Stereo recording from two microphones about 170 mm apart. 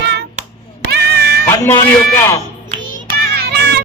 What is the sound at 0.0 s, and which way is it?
Clapping, 80° right.